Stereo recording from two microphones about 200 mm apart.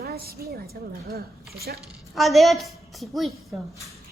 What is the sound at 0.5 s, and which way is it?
A woman's voice, 50° right (ahead or behind).